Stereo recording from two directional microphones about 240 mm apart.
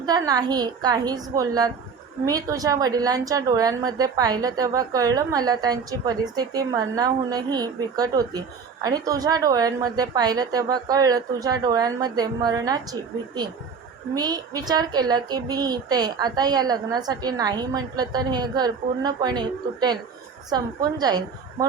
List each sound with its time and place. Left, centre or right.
0.0 s a woman's voice: centre